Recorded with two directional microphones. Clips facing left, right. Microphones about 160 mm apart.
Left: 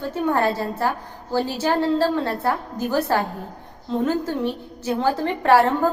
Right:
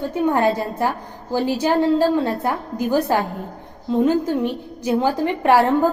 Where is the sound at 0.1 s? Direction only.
15° right (ahead or behind).